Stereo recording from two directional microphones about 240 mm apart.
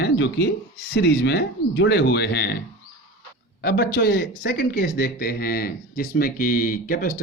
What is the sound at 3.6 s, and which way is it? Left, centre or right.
Speech, left.